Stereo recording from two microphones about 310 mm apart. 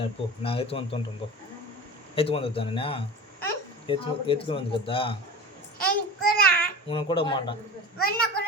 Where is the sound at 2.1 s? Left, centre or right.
Centre.